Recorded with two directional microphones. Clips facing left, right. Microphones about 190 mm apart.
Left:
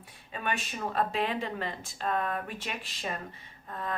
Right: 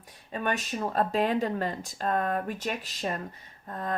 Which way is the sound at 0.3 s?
40° right (ahead or behind).